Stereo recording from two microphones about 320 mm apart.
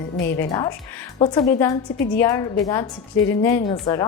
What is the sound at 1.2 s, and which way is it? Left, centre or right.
Speech, centre.